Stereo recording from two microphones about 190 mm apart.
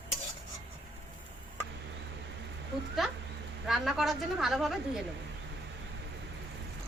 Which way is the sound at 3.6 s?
Centre (ahead or behind).